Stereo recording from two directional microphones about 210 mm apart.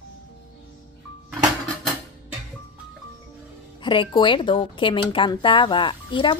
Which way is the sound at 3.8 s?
25° left (ahead or behind).